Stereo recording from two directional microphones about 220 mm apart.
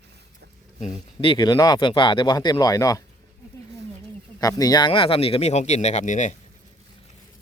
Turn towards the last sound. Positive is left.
turn(degrees=35)  # may be behind; listen again after turning